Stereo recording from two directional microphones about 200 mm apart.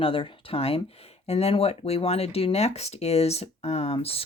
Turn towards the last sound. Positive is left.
turn(degrees=30)  # may be behind; listen again after turning